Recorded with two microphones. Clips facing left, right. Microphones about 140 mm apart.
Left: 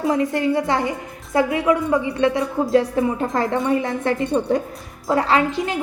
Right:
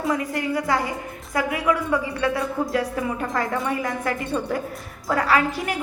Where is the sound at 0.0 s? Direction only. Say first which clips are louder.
Left 5 dB; 25° left (ahead or behind).